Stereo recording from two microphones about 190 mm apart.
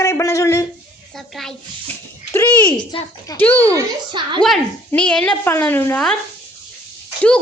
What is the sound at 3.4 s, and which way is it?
Speech, 10° left (ahead or behind).